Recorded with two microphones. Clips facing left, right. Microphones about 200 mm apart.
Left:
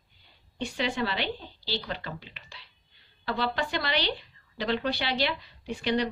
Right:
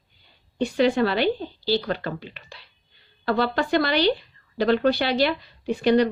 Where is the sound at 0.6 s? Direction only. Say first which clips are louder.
Right 10 dB; 50° right (ahead or behind).